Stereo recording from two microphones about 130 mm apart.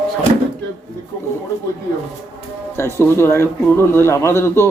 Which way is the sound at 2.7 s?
20° left (ahead or behind).